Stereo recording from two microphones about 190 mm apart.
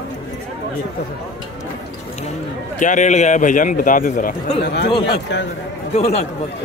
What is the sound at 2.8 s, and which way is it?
A man's voice, 40° left (ahead or behind).